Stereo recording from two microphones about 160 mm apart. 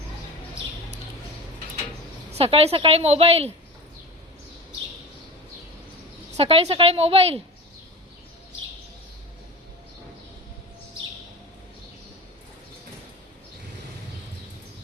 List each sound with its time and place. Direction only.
2.3 s a woman's voice: 40° right (ahead or behind)
6.3 s a woman's voice: 40° right (ahead or behind)